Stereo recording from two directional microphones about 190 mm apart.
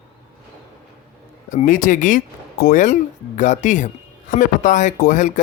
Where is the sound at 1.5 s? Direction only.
45° left (ahead or behind).